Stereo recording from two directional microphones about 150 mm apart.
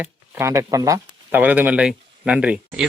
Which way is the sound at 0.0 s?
20° right (ahead or behind).